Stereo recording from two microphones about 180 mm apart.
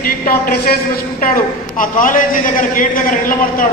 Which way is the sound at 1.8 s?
50° left (ahead or behind).